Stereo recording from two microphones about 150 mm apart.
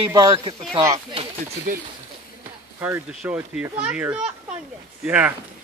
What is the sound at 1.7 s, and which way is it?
Speech, 65° right (ahead or behind).